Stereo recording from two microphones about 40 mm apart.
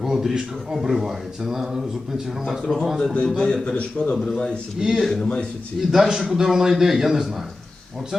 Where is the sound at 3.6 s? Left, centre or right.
Left.